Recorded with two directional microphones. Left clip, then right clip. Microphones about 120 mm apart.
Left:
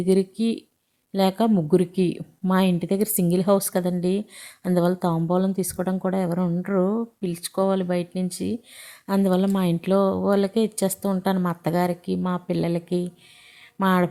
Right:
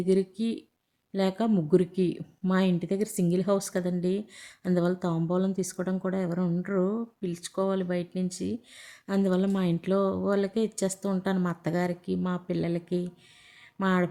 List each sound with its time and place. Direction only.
0.0 s speech: 25° left (ahead or behind)